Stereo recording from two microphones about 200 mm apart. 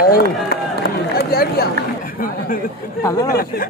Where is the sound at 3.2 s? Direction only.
45° left (ahead or behind).